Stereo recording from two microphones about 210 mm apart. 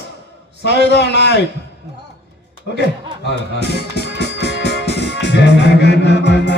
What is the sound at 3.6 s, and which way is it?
Music, 55° left (ahead or behind).